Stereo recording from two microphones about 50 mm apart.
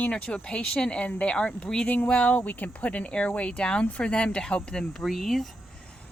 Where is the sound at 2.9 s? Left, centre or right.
Left; by 5.5 s centre.